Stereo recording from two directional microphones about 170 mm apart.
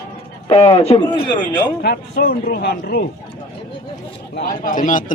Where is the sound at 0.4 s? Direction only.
30° left (ahead or behind).